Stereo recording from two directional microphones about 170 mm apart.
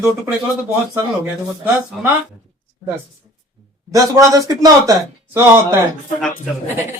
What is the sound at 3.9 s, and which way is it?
A man's voice, 20° right (ahead or behind).